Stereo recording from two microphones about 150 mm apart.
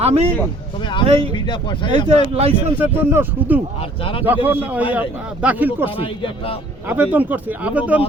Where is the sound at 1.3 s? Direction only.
30° left (ahead or behind).